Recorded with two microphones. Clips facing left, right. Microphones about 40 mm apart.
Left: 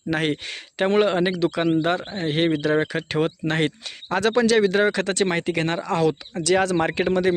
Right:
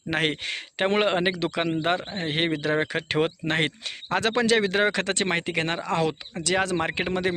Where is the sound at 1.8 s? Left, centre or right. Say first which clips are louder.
Left 3 dB; right.